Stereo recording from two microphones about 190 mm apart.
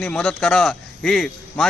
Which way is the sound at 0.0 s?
5° left (ahead or behind).